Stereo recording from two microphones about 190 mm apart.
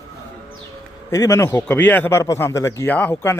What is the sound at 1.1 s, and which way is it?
Speech, 15° left (ahead or behind).